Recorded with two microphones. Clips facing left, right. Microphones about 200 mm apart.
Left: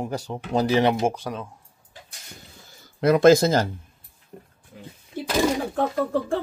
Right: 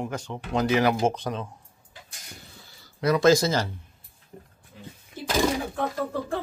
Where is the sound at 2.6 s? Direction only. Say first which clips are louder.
Left 4 dB; 45° left (ahead or behind).